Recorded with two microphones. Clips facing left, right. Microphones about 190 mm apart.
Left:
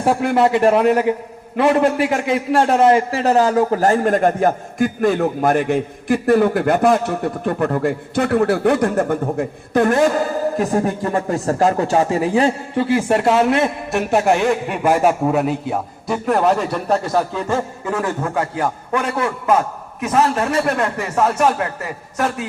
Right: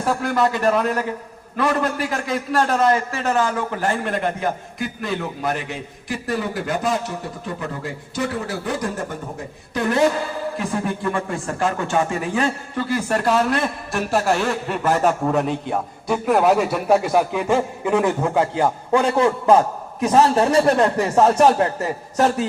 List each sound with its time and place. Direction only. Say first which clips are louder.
0.0 s a man's voice: left 4 dB; 25° left (ahead or behind); by 22.4 s 35° right (ahead or behind)